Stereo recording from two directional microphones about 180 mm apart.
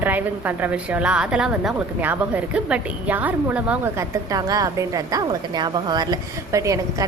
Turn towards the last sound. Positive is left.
turn(degrees=-20)  # may be behind; listen again after turning